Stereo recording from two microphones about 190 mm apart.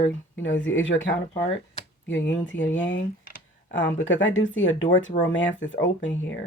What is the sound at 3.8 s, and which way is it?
Speech, 85° left.